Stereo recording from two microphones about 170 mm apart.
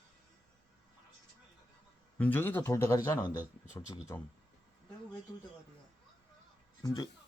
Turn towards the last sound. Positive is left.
turn(degrees=20)  # may be behind; listen again after turning